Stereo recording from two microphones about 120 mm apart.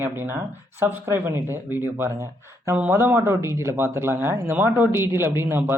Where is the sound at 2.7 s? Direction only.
15° right (ahead or behind).